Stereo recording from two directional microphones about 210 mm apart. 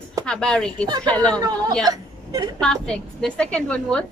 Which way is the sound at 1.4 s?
15° right (ahead or behind).